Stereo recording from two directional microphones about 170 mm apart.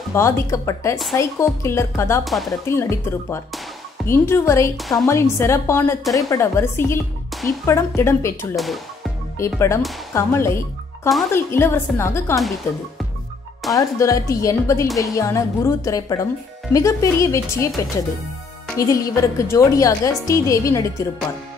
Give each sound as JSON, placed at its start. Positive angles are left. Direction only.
{"t": 0.1, "sound": "a woman's voice", "side_deg": 15}
{"t": 2.2, "sound": "speech", "side_deg": 0}
{"t": 2.7, "sound": "a woman's voice", "side_deg": 15}
{"t": 4.7, "sound": "speech", "side_deg": 0}
{"t": 5.0, "sound": "a woman's voice", "side_deg": 15}
{"t": 8.5, "sound": "speech", "side_deg": 0}
{"t": 9.4, "sound": "a woman's voice", "side_deg": 15}
{"t": 13.7, "sound": "a woman's voice", "side_deg": 20}
{"t": 18.8, "sound": "a woman's voice", "side_deg": 20}